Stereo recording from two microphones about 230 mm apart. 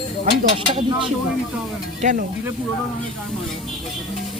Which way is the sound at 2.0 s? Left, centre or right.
Right.